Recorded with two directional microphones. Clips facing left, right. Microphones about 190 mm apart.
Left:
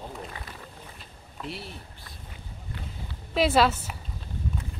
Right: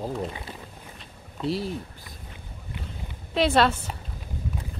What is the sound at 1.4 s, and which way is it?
Speech, 35° right (ahead or behind).